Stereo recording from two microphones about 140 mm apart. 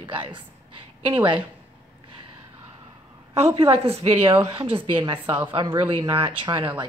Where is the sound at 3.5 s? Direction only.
45° right (ahead or behind).